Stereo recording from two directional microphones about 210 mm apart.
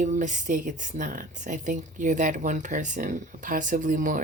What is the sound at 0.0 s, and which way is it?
Speech, 35° right (ahead or behind).